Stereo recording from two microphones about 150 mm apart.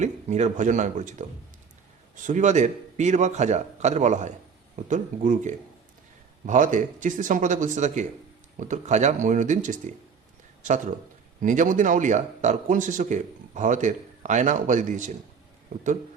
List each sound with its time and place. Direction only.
0.0 s a man's voice: 50° right (ahead or behind)
2.2 s a man's voice: 55° right (ahead or behind)
11.4 s speech: 60° right (ahead or behind)